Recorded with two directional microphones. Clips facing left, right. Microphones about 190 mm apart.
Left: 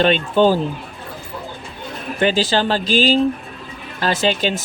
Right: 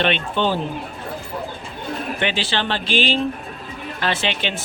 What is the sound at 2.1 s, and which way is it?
Speech, 40° left (ahead or behind).